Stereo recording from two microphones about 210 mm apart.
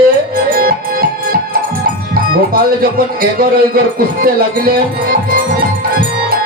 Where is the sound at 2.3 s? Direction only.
45° right (ahead or behind).